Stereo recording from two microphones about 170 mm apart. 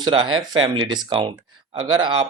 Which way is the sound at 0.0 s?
25° right (ahead or behind).